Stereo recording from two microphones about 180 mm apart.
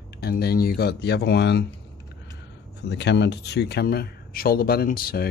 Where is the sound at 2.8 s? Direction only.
70° left (ahead or behind).